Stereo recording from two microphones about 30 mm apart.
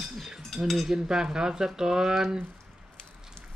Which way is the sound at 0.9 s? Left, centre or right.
Right.